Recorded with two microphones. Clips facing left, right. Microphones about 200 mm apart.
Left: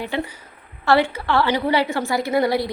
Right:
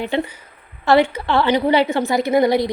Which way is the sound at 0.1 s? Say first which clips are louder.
Right 4 dB; 25° right (ahead or behind).